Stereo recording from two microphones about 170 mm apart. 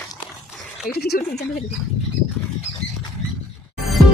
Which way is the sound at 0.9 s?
70° left (ahead or behind).